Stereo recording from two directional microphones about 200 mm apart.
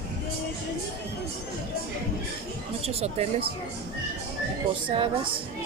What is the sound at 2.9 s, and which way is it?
Speech, 30° right (ahead or behind).